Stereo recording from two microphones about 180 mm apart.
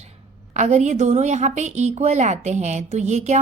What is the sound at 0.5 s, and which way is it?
A woman's voice, 40° right (ahead or behind).